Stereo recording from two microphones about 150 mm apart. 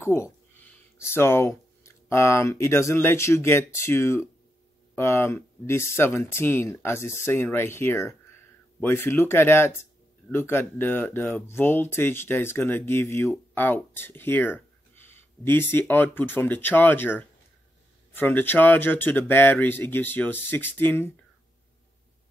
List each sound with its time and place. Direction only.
0.0 s speech: 15° left (ahead or behind)